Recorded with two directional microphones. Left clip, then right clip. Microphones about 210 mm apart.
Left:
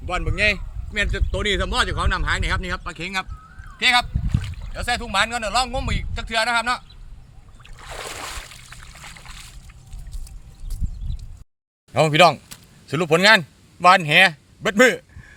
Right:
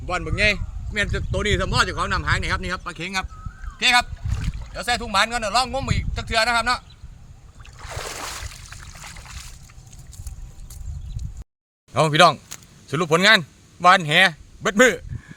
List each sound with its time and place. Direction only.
0.0 s speech: centre (ahead or behind)
7.6 s a sound: centre (ahead or behind)
11.9 s a man's voice: 10° left (ahead or behind)